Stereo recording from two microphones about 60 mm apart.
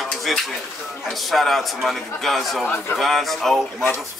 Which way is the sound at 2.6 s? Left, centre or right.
Left.